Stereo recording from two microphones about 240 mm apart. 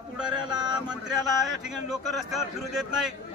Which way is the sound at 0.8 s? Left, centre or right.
Centre.